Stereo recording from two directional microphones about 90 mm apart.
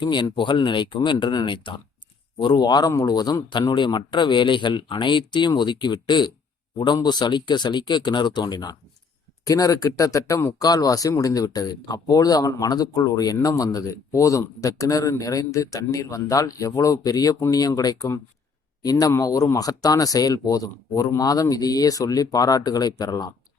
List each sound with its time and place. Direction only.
0.0 s speech: 55° left (ahead or behind)
9.4 s speech: 40° left (ahead or behind)